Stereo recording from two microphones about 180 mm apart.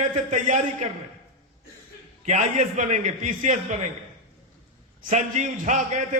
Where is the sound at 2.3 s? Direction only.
45° right (ahead or behind).